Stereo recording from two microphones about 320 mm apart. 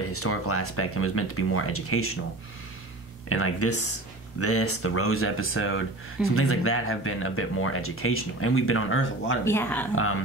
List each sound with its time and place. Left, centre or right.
0.1 s speech: left
3.3 s speech: left
9.4 s speech: centre